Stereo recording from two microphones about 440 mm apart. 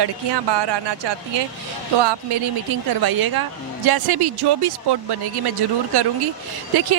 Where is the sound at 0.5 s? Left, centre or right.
Right.